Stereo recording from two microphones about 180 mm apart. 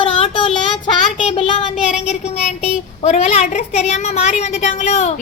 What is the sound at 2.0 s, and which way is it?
Child singing, 35° left (ahead or behind).